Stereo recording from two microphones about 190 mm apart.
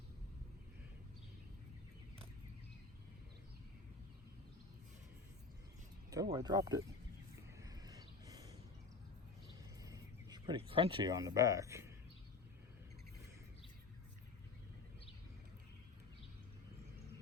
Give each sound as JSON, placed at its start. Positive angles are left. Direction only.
{"t": 6.3, "sound": "speech", "side_deg": -20}
{"t": 7.6, "sound": "a sound", "side_deg": -20}
{"t": 9.8, "sound": "speech", "side_deg": -20}